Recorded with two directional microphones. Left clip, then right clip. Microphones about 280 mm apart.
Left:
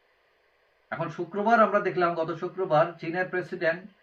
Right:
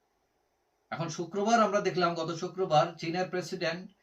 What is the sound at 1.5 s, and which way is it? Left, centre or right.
Speech, centre.